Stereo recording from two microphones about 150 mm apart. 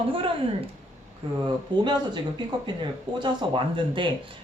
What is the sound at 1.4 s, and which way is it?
A man's voice, 30° right (ahead or behind).